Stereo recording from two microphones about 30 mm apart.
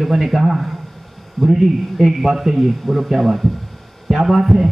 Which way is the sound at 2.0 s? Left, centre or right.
Centre.